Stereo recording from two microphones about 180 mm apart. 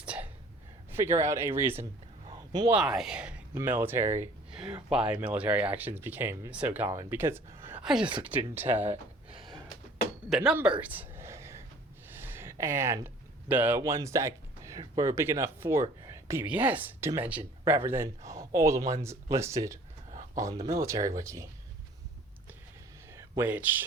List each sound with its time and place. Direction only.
0.0 s sneeze: 5° right (ahead or behind)
0.9 s speech: 15° right (ahead or behind)
2.2 s a sound: 25° right (ahead or behind)
2.7 s speech: 5° right (ahead or behind)
4.5 s speech: 5° right (ahead or behind)
8.8 s a sound: 35° right (ahead or behind)
10.2 s a sound: 5° right (ahead or behind)
13.5 s speech: 10° right (ahead or behind)
23.1 s speech: 15° right (ahead or behind)